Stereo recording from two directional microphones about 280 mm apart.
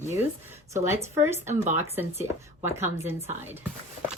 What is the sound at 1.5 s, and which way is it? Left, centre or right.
Speech, right.